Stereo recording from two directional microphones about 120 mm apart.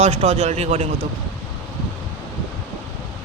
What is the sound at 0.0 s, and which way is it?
Speech, 55° right (ahead or behind).